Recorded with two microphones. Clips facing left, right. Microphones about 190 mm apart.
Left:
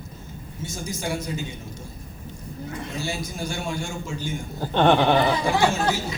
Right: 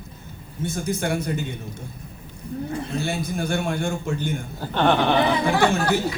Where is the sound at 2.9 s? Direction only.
60° right (ahead or behind).